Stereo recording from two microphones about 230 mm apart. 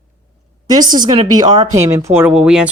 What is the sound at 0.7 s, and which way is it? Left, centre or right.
Speech, centre.